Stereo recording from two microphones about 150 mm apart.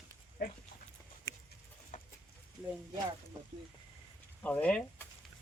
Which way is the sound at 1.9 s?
55° left (ahead or behind).